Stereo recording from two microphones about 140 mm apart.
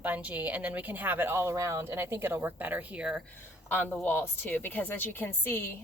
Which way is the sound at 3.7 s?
15° left (ahead or behind).